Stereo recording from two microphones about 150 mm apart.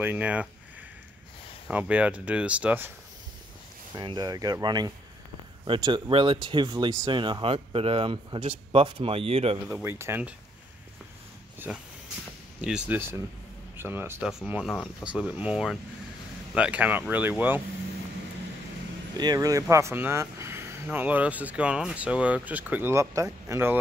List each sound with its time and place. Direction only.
0.0 s speech: 10° right (ahead or behind)
1.7 s speech: 10° right (ahead or behind)
3.9 s speech: 25° right (ahead or behind)
9.7 s speech: 15° right (ahead or behind)
11.7 s speech: 10° right (ahead or behind)
19.1 s speech: 25° right (ahead or behind)